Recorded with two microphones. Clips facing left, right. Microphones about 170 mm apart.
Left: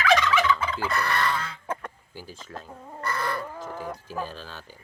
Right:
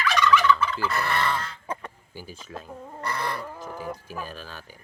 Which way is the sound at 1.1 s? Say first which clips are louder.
Right 1 dB; 20° right (ahead or behind).